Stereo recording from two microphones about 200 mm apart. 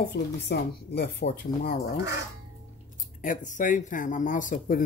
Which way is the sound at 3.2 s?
40° left (ahead or behind).